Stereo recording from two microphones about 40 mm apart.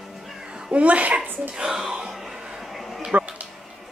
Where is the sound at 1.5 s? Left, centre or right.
Centre.